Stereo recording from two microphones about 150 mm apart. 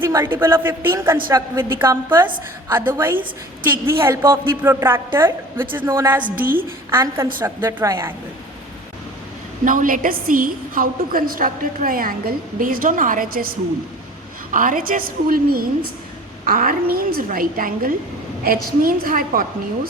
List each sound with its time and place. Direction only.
0.0 s a woman's voice: 15° right (ahead or behind)
6.3 s a woman's voice: 70° right (ahead or behind)
6.9 s a woman's voice: 15° right (ahead or behind)
9.6 s a woman's voice: 65° right (ahead or behind)